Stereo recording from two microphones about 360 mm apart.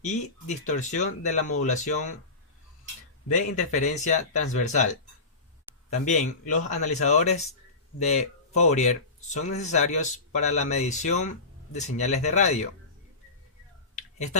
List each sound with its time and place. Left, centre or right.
0.0 s speech: centre
3.3 s speech: centre
5.9 s speech: centre